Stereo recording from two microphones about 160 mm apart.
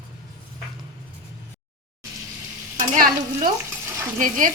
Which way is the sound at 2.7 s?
55° right (ahead or behind).